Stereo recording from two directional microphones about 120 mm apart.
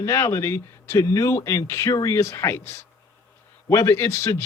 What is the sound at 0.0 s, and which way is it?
A man's voice, 25° left (ahead or behind).